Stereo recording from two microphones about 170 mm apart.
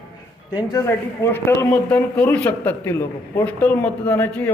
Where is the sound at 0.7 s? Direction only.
15° left (ahead or behind).